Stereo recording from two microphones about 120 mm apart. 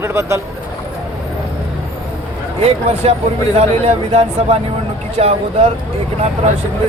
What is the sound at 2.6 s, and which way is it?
Speech, 60° right (ahead or behind).